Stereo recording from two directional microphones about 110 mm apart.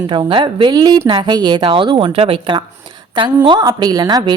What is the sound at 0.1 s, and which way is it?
A woman's voice, 50° right (ahead or behind).